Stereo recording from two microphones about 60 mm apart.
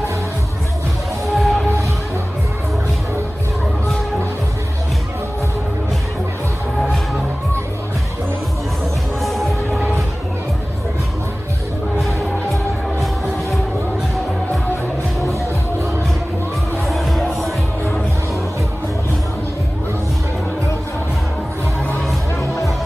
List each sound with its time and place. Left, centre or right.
1.3 s music: centre
9.2 s music: centre
12.0 s music: centre
16.8 s music: centre